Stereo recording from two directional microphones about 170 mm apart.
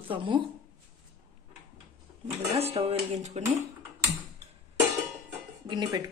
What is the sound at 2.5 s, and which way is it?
Speech, 35° right (ahead or behind).